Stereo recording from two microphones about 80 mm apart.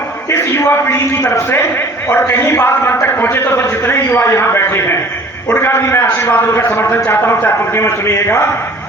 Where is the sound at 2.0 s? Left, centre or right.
Left.